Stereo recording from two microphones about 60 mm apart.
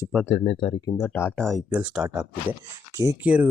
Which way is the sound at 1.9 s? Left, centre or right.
Centre.